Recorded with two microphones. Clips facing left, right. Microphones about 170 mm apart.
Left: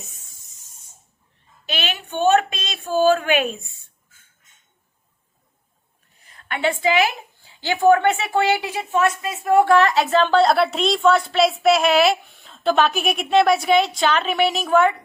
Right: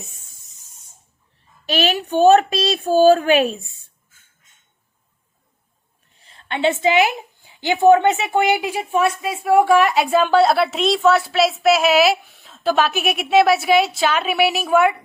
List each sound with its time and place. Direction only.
1.6 s speech: 40° right (ahead or behind)
6.2 s a woman's voice: 25° right (ahead or behind); by 14.9 s 10° right (ahead or behind)